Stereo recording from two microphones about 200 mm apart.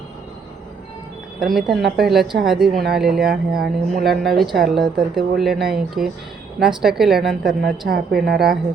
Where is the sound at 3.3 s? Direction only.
45° right (ahead or behind).